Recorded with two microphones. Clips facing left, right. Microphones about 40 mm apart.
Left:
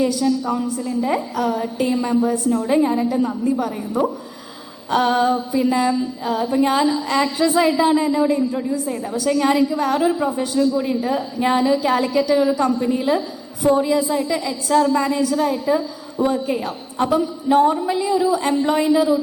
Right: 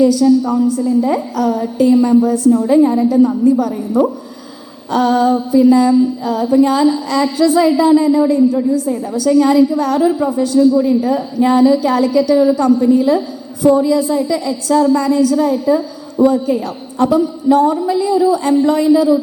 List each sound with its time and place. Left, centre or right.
0.0 s a woman's voice: left
1.5 s a sound: centre
1.8 s a woman's voice: left
4.9 s a woman's voice: left